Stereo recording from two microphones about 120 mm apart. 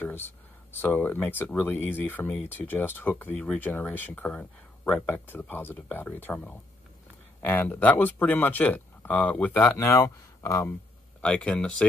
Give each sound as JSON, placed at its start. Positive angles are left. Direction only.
{"t": 0.0, "sound": "speech", "side_deg": 15}
{"t": 9.8, "sound": "speech", "side_deg": 25}
{"t": 11.1, "sound": "speech", "side_deg": 10}